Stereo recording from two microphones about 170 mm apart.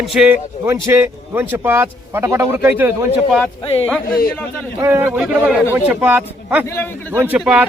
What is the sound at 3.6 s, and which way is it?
Speech, 35° left (ahead or behind).